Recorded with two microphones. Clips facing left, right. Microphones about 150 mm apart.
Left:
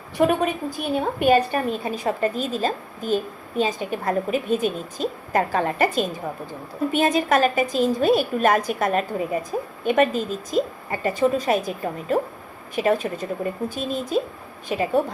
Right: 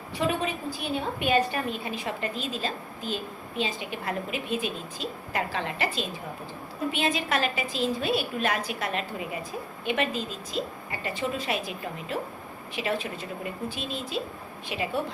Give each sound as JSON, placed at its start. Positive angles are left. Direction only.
{"t": 0.2, "sound": "a woman's voice", "side_deg": 50}